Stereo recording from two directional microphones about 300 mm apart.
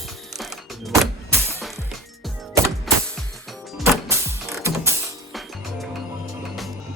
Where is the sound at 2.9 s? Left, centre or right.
Centre.